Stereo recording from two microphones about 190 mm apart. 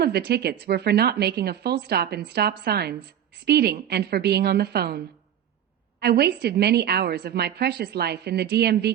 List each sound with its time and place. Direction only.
0.0 s a woman's voice: 60° right (ahead or behind)